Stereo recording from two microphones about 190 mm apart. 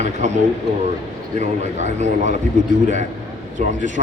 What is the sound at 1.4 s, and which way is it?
Speech, 40° right (ahead or behind).